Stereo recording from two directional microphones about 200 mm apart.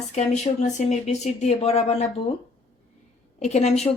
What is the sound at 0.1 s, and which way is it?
Speech, 35° left (ahead or behind).